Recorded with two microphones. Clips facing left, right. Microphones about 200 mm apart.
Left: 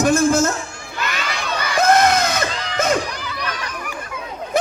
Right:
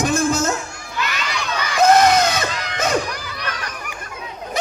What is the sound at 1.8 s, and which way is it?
Screaming, 55° left (ahead or behind).